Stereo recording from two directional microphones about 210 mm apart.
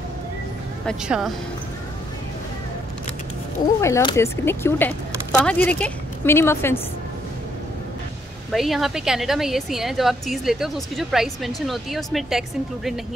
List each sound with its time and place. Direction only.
0.8 s a woman's voice: centre (ahead or behind)
3.8 s speech: 15° left (ahead or behind)
8.5 s a woman's voice: centre (ahead or behind)